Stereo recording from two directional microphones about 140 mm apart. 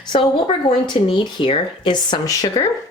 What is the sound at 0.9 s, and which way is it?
A woman's voice, 35° left (ahead or behind).